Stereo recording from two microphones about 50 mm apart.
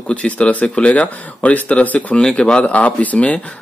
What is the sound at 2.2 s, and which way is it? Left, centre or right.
Speech, centre.